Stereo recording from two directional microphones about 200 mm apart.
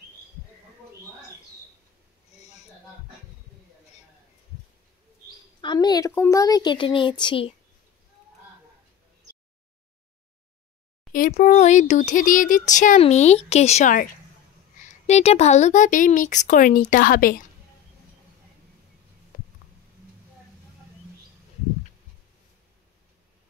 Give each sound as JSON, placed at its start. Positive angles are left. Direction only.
{"t": 5.6, "sound": "a woman's voice", "side_deg": 20}
{"t": 11.1, "sound": "speech", "side_deg": 40}